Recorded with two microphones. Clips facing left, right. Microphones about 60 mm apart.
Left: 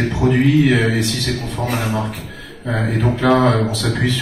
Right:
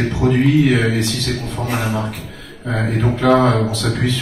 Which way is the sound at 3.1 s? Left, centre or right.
Centre.